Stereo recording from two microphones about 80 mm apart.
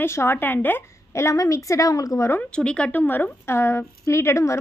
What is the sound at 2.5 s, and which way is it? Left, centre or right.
A woman's voice, centre.